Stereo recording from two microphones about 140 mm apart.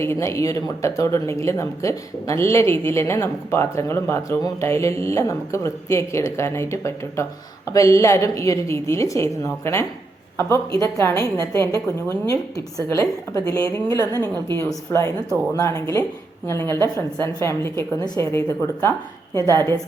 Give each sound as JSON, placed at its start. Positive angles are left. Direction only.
{"t": 0.0, "sound": "speech", "side_deg": 20}
{"t": 10.9, "sound": "a woman's voice", "side_deg": 20}